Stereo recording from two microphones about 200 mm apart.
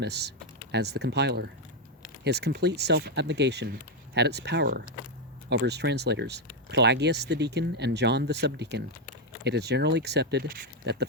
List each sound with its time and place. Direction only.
0.0 s speech: 55° right (ahead or behind)